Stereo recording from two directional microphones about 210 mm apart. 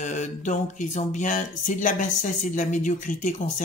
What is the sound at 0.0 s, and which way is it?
Speech, 35° left (ahead or behind).